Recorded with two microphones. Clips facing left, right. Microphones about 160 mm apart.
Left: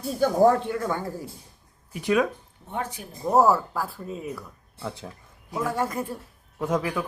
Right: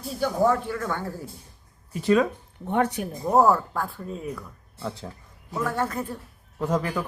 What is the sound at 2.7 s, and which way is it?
Speech, 65° right (ahead or behind).